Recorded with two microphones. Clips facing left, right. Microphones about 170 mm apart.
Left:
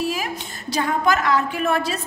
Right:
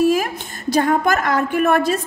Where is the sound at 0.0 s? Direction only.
50° right (ahead or behind).